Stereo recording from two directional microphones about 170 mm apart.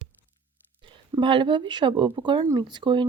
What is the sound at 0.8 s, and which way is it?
Speech, 30° right (ahead or behind).